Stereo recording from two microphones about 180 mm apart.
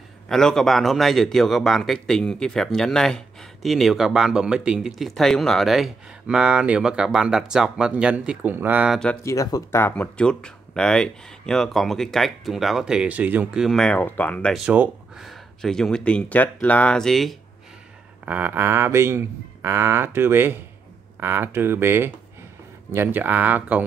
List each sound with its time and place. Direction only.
0.3 s speech: centre (ahead or behind)
9.2 s speech: 20° left (ahead or behind); by 17.4 s centre (ahead or behind)
18.2 s speech: 10° right (ahead or behind)